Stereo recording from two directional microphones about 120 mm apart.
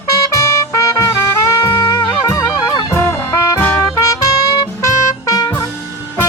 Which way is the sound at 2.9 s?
20° left (ahead or behind).